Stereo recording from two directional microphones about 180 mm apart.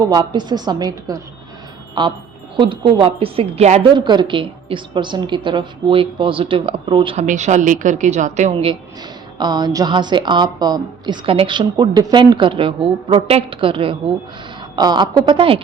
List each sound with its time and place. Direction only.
0.0 s a woman's voice: 20° right (ahead or behind)
7.3 s a woman's voice: 40° right (ahead or behind)
9.4 s a woman's voice: 25° right (ahead or behind)